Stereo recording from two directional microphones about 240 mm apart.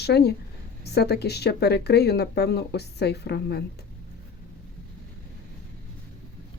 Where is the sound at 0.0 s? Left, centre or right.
Left.